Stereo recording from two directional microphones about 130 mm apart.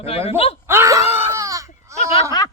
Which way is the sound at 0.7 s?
25° right (ahead or behind).